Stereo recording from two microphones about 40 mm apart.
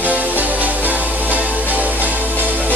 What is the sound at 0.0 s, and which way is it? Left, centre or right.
Music, right.